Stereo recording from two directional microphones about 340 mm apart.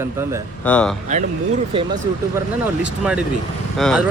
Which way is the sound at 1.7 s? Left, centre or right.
Centre.